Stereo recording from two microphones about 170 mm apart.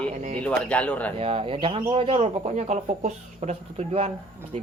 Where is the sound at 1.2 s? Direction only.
35° right (ahead or behind).